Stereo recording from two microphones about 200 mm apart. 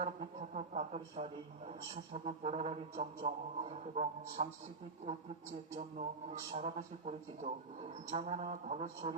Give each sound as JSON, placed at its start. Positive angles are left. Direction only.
{"t": 0.0, "sound": "speech", "side_deg": -35}